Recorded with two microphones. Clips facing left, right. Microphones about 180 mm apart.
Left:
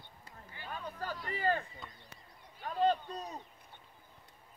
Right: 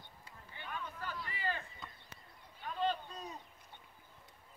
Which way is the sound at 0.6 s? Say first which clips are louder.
Left 3 dB; 35° left (ahead or behind).